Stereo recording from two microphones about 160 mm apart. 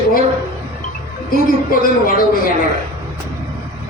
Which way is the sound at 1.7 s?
65° left (ahead or behind).